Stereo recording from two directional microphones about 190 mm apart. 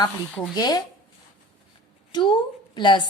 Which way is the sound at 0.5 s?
20° left (ahead or behind).